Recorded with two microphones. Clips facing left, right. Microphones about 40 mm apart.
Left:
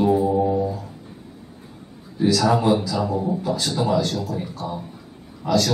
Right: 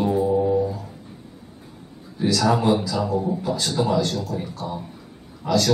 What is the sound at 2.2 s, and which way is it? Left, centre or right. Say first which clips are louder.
A man's voice: left 1 dB; centre.